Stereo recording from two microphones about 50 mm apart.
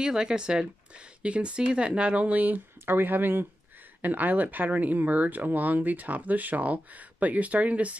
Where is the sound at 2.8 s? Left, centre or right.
Right.